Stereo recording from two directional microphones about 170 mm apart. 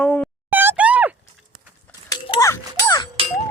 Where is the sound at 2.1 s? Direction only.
30° left (ahead or behind).